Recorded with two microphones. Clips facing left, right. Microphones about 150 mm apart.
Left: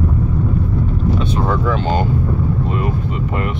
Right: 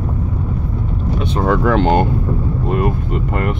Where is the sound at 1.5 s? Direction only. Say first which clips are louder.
Right 7 dB; 70° right (ahead or behind); by 3.6 s 50° right (ahead or behind).